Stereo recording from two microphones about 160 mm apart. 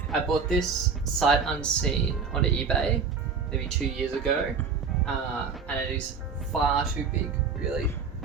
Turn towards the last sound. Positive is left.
turn(degrees=-10)  # may be behind; listen again after turning